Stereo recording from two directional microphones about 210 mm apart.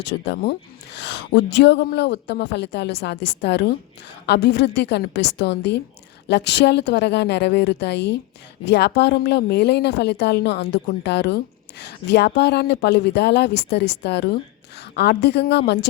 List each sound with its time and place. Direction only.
0.0 s speech: 55° left (ahead or behind)